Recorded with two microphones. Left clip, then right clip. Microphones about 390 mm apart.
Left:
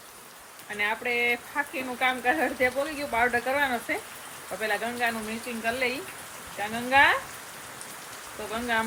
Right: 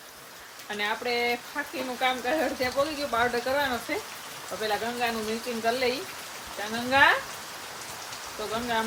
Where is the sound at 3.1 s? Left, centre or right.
Centre.